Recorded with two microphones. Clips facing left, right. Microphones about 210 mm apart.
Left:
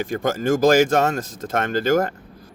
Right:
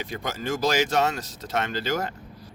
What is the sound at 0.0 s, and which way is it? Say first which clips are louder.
Speech: left 9 dB; 50° left (ahead or behind).